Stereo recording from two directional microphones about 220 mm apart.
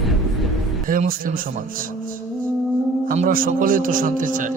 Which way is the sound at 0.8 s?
40° right (ahead or behind).